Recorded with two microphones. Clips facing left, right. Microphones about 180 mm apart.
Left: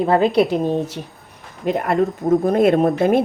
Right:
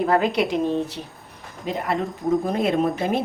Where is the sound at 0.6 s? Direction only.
45° left (ahead or behind).